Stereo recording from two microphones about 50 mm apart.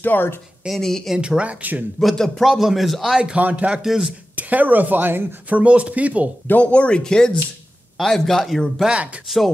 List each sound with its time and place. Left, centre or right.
0.0 s a woman's voice: left
0.7 s a man's voice: centre
1.1 s speech: centre
2.0 s a man's voice: centre
3.3 s speech: right
3.8 s speech: centre
4.4 s speech: right
5.6 s speech: right
6.6 s a man's voice: left; by 8.7 s centre
8.9 s speech: right